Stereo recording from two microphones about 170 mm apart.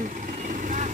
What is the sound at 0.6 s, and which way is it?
Vehicle, 50° right (ahead or behind).